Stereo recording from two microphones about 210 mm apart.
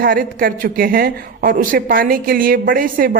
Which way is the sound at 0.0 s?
45° right (ahead or behind).